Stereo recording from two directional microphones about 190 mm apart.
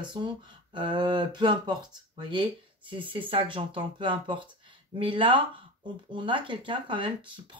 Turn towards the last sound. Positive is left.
turn(degrees=-25)  # may be behind; listen again after turning